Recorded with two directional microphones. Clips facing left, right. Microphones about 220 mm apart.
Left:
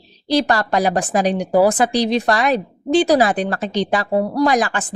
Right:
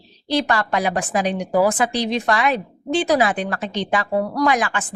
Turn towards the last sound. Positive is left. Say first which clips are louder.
# left 3 dB
turn(degrees=35)  # may be behind; listen again after turning